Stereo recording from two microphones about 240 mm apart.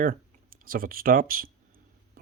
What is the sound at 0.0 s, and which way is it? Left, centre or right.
Speech, right.